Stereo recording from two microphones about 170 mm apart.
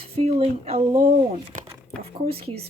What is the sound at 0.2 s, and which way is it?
Speech, 40° right (ahead or behind).